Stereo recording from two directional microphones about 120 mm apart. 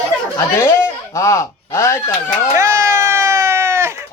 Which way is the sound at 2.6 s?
25° right (ahead or behind).